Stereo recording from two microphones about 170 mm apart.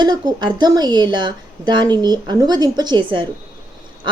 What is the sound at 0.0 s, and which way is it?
A woman's voice, 25° right (ahead or behind).